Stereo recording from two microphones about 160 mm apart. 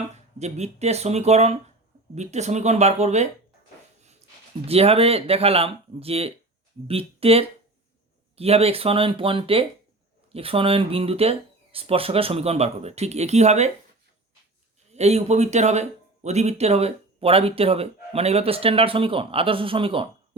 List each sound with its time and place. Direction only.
0.3 s speech: 45° right (ahead or behind)
4.6 s speech: 40° right (ahead or behind)
14.9 s speech: 40° right (ahead or behind)